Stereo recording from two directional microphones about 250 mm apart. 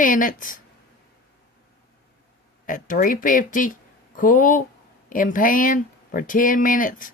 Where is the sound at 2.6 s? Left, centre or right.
Left.